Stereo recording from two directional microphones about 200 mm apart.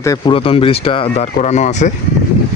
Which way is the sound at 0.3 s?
25° left (ahead or behind).